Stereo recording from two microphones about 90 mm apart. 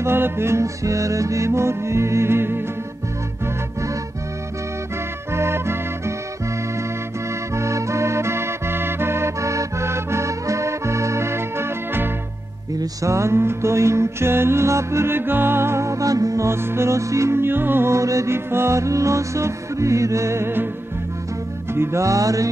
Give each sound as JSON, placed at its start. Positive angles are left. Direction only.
{"t": 0.0, "sound": "mantra", "side_deg": -25}
{"t": 5.3, "sound": "music", "side_deg": -30}
{"t": 7.5, "sound": "music", "side_deg": -35}
{"t": 13.0, "sound": "mantra", "side_deg": -35}
{"t": 21.7, "sound": "mantra", "side_deg": -30}